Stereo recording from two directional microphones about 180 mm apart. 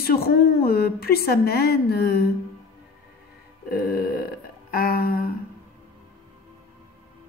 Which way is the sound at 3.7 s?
55° left (ahead or behind).